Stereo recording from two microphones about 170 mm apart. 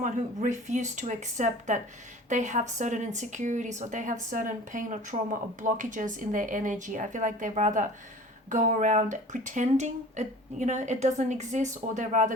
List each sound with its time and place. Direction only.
0.0 s a woman's voice: 45° right (ahead or behind)